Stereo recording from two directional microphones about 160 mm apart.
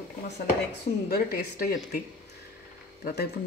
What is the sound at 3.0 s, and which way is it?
Speech, 80° left.